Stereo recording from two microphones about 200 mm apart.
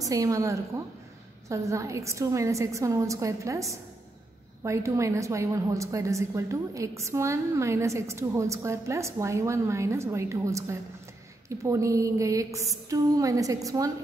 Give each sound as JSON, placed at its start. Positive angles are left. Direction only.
{"t": 0.0, "sound": "a woman's voice", "side_deg": -15}